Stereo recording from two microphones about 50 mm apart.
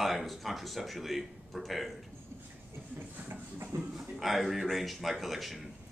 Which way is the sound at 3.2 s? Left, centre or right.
Right.